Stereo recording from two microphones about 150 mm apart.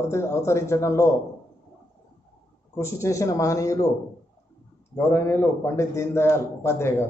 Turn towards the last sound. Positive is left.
turn(degrees=15)  # may be behind; listen again after turning